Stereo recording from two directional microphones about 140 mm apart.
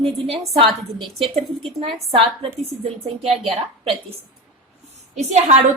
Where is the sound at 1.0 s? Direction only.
Centre (ahead or behind).